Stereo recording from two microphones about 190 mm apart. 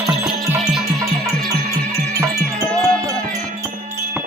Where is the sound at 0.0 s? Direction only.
Centre (ahead or behind).